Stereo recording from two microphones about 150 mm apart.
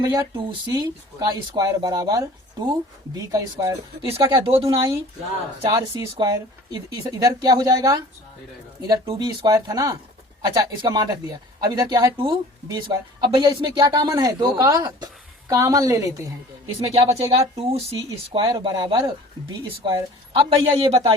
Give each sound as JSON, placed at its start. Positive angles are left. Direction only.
{"t": 0.0, "sound": "speech", "side_deg": -20}
{"t": 4.0, "sound": "speech", "side_deg": -35}
{"t": 16.9, "sound": "speech", "side_deg": -45}